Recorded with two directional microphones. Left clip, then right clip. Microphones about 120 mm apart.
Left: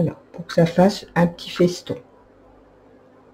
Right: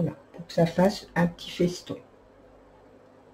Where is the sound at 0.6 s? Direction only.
40° left (ahead or behind).